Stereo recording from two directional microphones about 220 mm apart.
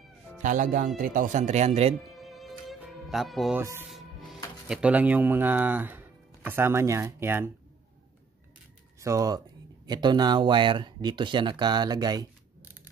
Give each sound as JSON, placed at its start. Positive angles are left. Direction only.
{"t": 0.4, "sound": "speech", "side_deg": -35}
{"t": 2.0, "sound": "music", "side_deg": 0}
{"t": 4.6, "sound": "speech", "side_deg": -5}
{"t": 9.0, "sound": "speech", "side_deg": -15}